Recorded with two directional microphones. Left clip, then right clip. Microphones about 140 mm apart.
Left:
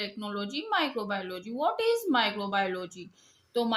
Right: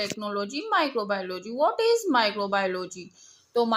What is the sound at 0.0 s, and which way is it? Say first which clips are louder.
Speech: right 6 dB; 45° right (ahead or behind).